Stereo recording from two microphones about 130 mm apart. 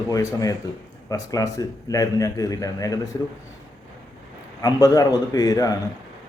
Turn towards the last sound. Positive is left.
turn(degrees=30)  # may be behind; listen again after turning